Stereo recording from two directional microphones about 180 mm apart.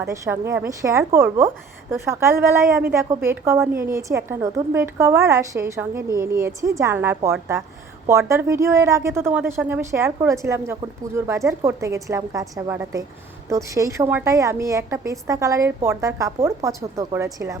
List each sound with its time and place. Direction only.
0.0 s a woman's voice: 15° right (ahead or behind)